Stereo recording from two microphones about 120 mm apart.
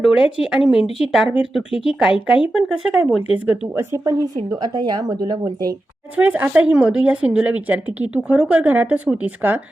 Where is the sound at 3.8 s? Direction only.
25° right (ahead or behind).